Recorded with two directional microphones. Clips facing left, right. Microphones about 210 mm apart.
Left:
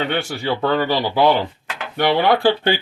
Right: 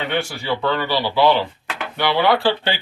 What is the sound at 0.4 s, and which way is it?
Speech, 45° left (ahead or behind).